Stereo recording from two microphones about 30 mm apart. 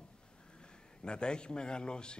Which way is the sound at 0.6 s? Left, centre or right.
Left.